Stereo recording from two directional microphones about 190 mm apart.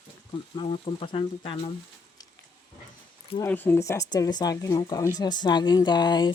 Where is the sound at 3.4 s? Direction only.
10° left (ahead or behind).